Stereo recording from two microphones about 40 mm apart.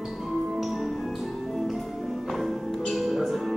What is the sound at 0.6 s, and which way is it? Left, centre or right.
Music, centre.